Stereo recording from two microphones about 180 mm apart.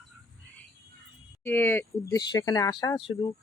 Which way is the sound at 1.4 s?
10° left (ahead or behind).